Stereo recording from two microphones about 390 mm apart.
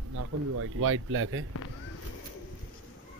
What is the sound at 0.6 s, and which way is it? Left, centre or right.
Speech, right.